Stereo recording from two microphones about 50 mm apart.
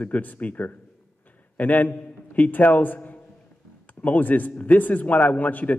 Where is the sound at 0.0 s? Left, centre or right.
Left.